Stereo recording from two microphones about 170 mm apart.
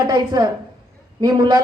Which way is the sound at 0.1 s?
25° right (ahead or behind).